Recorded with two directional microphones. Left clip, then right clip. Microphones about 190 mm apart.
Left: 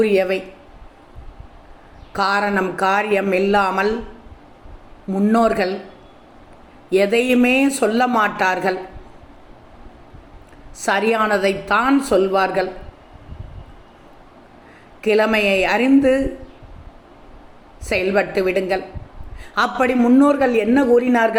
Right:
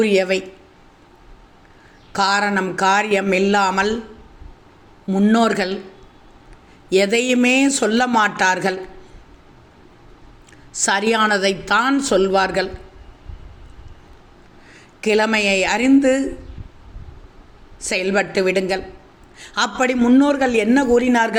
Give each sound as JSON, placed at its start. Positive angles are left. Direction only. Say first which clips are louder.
{"t": 0.0, "sound": "a man's voice", "louder": "even", "side_deg": -35}
{"t": 2.1, "sound": "a man's voice", "louder": "right 1 dB", "side_deg": -35}
{"t": 5.0, "sound": "a man's voice", "louder": "even", "side_deg": -30}
{"t": 6.9, "sound": "a man's voice", "louder": "left 1 dB", "side_deg": -35}
{"t": 10.8, "sound": "a man's voice", "louder": "even", "side_deg": -35}
{"t": 15.0, "sound": "a man's voice", "louder": "left 1 dB", "side_deg": -35}
{"t": 17.8, "sound": "a man's voice", "louder": "left 1 dB", "side_deg": -35}